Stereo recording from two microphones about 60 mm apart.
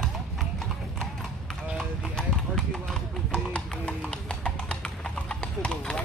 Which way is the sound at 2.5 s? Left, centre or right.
Centre.